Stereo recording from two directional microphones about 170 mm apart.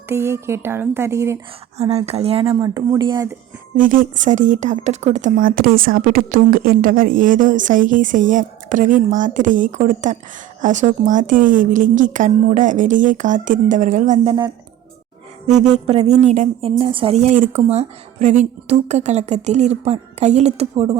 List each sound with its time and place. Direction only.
0.1 s speech: 15° right (ahead or behind)
1.8 s speech: 35° right (ahead or behind)
3.8 s speech: 55° right (ahead or behind)
15.4 s speech: 40° right (ahead or behind)